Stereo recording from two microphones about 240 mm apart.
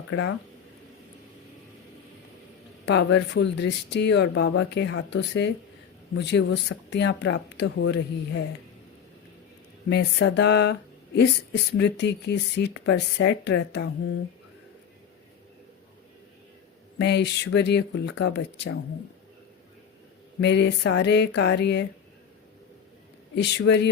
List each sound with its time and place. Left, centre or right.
0.1 s speech: left
2.8 s speech: left
9.9 s speech: left
17.0 s speech: left
20.4 s speech: left
23.3 s speech: left